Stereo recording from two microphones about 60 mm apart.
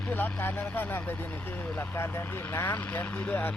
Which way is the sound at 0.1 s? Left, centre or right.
Left.